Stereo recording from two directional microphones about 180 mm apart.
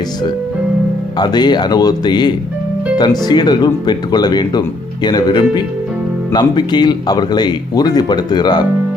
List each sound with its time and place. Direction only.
1.2 s speech: 25° left (ahead or behind)